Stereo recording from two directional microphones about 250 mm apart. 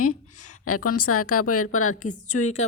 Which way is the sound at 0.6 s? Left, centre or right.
Left.